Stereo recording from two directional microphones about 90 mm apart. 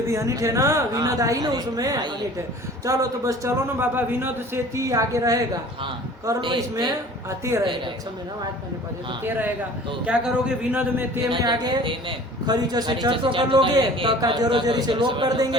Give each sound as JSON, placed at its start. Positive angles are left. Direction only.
{"t": 0.1, "sound": "a man's voice", "side_deg": -35}
{"t": 2.8, "sound": "a man's voice", "side_deg": -40}
{"t": 6.4, "sound": "a woman's voice", "side_deg": -60}
{"t": 7.3, "sound": "a man's voice", "side_deg": -30}
{"t": 10.1, "sound": "a man's voice", "side_deg": -15}
{"t": 11.3, "sound": "a woman's voice", "side_deg": -55}
{"t": 12.7, "sound": "speech", "side_deg": -50}
{"t": 14.3, "sound": "a man's voice", "side_deg": -50}